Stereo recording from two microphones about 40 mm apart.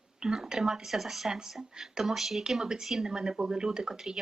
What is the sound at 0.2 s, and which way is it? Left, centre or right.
Speech, centre.